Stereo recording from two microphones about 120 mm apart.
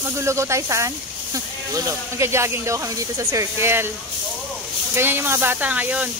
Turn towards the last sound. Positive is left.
turn(degrees=-15)  # may be behind; listen again after turning